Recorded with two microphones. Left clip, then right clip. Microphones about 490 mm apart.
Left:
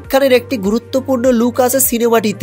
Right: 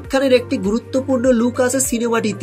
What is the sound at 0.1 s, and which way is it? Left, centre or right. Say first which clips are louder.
Speech: left 4 dB; centre.